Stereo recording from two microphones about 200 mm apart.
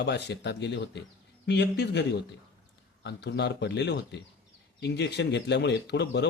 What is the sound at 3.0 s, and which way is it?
Speech, 60° left (ahead or behind).